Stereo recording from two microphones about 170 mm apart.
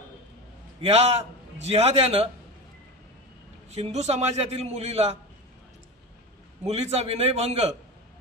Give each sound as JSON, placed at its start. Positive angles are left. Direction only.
{"t": 0.7, "sound": "a man's voice", "side_deg": -40}
{"t": 3.7, "sound": "a man's voice", "side_deg": -40}
{"t": 6.6, "sound": "a man's voice", "side_deg": -40}